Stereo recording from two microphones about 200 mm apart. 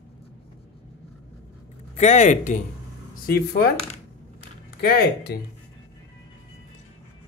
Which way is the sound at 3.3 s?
50° left (ahead or behind).